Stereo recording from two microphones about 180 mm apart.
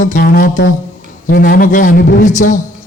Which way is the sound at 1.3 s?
55° left (ahead or behind).